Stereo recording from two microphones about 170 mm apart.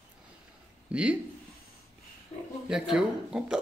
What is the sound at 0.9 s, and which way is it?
Speech, 5° right (ahead or behind).